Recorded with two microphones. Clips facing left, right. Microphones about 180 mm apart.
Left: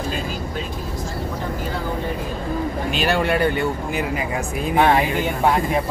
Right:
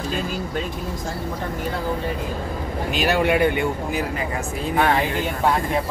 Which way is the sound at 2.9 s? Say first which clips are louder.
Right 2 dB; 10° right (ahead or behind).